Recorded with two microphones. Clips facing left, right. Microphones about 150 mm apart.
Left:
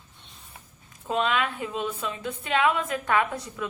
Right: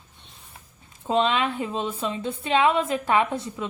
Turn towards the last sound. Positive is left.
turn(degrees=-25)  # may be behind; listen again after turning